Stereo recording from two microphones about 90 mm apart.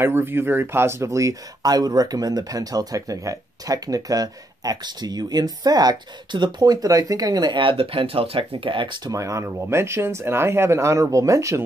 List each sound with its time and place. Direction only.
0.0 s speech: 25° right (ahead or behind); by 7.5 s 45° right (ahead or behind)
7.5 s speech: 80° right; by 9.1 s 60° right (ahead or behind)
9.1 s speech: 35° right (ahead or behind)